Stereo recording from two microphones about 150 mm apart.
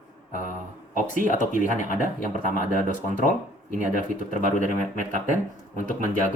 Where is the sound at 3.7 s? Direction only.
60° right (ahead or behind).